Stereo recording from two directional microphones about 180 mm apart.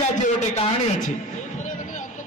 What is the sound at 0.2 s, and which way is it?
Speech, 45° left (ahead or behind).